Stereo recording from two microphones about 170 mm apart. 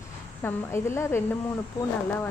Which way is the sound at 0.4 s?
15° left (ahead or behind).